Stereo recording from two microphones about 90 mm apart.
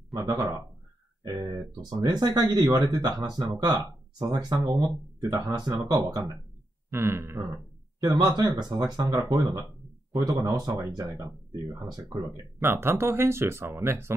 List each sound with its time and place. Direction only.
0.1 s speech: 50° right (ahead or behind)
6.9 s speech: 25° right (ahead or behind)
8.0 s speech: 45° right (ahead or behind)
11.6 s speech: 50° right (ahead or behind)
12.5 s speech: 25° right (ahead or behind)